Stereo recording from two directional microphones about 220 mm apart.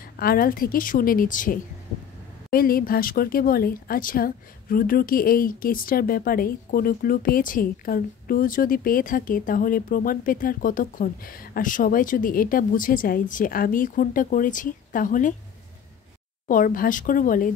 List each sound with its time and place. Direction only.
0.2 s speech: 40° left (ahead or behind)
16.4 s speech: 40° left (ahead or behind)